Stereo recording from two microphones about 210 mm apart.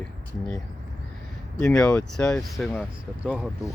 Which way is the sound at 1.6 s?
5° left (ahead or behind).